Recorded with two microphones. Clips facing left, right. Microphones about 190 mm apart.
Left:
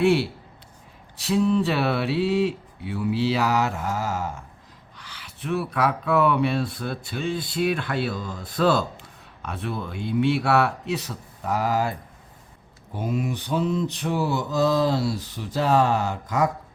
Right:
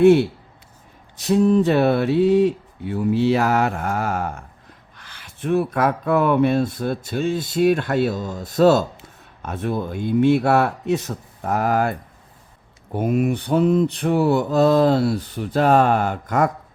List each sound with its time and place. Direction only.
1.2 s speech: 45° right (ahead or behind)
12.9 s mantra: 60° right (ahead or behind)